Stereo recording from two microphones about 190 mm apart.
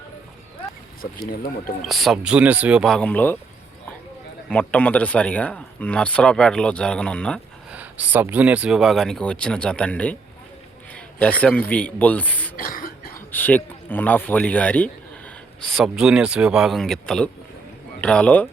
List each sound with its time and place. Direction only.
1.8 s speech: centre (ahead or behind)
4.4 s speech: 5° left (ahead or behind)
7.7 s a sound: 10° right (ahead or behind)
8.1 s a man's voice: 10° right (ahead or behind); by 12.5 s 10° left (ahead or behind)
12.5 s cough: 50° left (ahead or behind)
13.3 s a man's voice: 10° left (ahead or behind)